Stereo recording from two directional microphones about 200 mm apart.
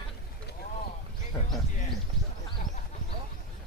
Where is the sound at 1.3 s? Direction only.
15° left (ahead or behind).